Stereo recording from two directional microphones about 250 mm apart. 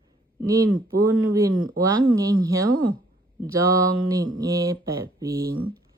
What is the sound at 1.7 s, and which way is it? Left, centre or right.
Speech, centre.